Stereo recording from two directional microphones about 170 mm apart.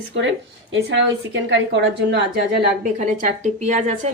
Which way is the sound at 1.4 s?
90° right.